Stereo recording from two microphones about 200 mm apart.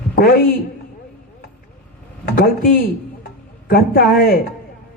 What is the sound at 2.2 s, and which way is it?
A man's voice, 50° left (ahead or behind).